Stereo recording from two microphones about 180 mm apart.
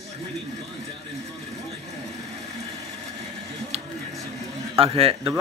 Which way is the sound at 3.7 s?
35° right (ahead or behind).